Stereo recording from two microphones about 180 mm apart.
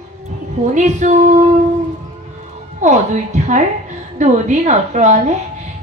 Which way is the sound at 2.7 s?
40° right (ahead or behind).